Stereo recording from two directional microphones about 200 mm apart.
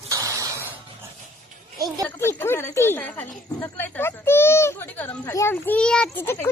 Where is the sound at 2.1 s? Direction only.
10° left (ahead or behind).